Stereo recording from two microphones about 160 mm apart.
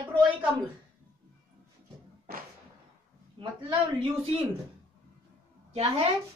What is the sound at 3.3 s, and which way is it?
A man's voice, 30° right (ahead or behind).